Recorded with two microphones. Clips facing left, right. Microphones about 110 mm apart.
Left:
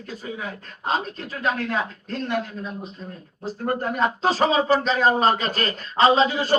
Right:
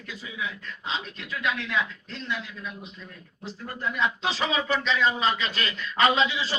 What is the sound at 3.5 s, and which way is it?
Speech, 50° left (ahead or behind).